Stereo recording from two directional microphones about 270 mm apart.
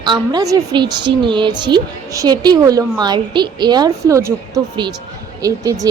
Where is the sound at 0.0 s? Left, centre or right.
Centre.